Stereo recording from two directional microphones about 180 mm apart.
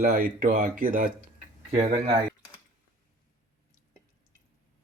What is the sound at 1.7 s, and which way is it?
Speech, 35° right (ahead or behind).